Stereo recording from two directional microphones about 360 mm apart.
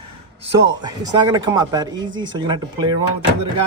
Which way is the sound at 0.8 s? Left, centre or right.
Centre.